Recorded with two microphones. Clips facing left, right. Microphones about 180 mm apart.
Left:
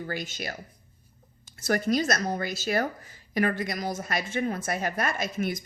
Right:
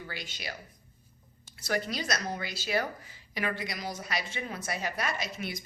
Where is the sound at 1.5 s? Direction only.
45° left (ahead or behind).